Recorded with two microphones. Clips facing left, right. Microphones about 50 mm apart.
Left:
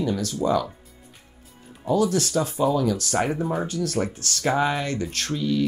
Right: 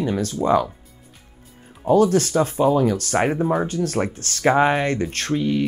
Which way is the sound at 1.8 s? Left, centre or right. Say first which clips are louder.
Right 6 dB; right.